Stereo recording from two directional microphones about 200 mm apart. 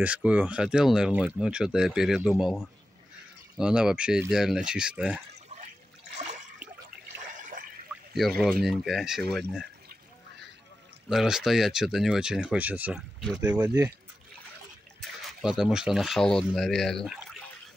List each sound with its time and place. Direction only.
0.0 s speech: 5° right (ahead or behind)
7.3 s water: 40° right (ahead or behind)
7.9 s pour: centre (ahead or behind)
8.4 s speech: centre (ahead or behind)
11.1 s speech: centre (ahead or behind)
13.6 s speech: 20° right (ahead or behind)
15.0 s speech: centre (ahead or behind)